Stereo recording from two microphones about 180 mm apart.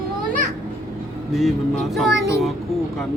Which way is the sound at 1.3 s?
Centre (ahead or behind).